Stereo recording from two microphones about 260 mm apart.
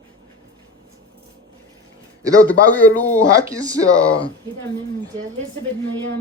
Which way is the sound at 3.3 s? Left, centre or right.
Centre.